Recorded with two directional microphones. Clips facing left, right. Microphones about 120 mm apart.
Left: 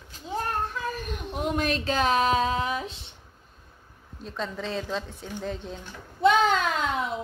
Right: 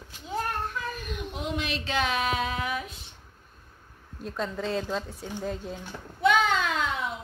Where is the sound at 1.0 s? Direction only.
45° left (ahead or behind); by 3.0 s 25° left (ahead or behind).